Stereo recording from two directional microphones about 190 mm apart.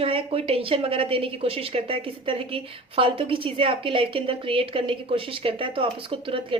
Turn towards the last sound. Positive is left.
turn(degrees=-30)  # may be behind; listen again after turning